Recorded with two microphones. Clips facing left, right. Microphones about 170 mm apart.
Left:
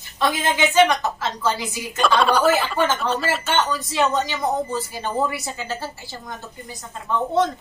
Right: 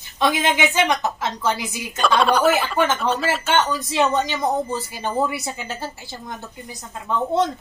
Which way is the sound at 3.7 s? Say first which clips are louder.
Right 1 dB; 20° right (ahead or behind).